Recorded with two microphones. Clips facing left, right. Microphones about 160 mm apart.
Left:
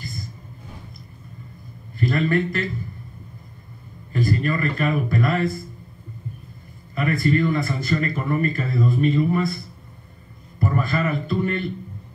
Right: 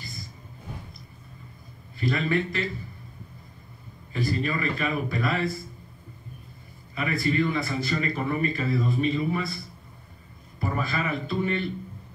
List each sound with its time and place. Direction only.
2.0 s a man's voice: 50° left (ahead or behind)
4.1 s a man's voice: 50° left (ahead or behind)
7.0 s a man's voice: 50° left (ahead or behind)
10.6 s a man's voice: 50° left (ahead or behind)